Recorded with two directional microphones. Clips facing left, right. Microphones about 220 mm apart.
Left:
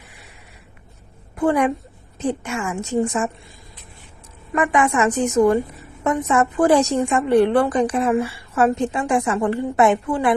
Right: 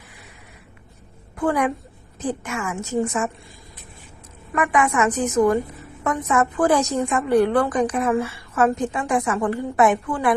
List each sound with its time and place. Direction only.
1.4 s a woman's voice: 25° left (ahead or behind)
4.5 s a woman's voice: 30° left (ahead or behind)